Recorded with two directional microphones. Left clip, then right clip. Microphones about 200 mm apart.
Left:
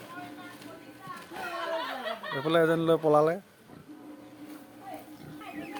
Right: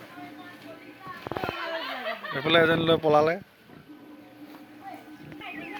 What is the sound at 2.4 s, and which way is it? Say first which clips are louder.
Speech: right 3 dB; 5° left (ahead or behind).